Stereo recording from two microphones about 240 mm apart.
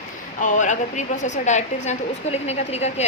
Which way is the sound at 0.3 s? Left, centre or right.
Left.